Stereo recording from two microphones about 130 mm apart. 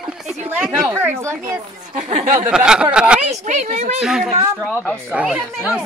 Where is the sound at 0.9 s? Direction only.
20° right (ahead or behind).